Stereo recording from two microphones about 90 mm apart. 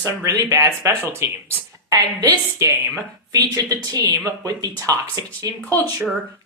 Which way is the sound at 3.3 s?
45° right (ahead or behind).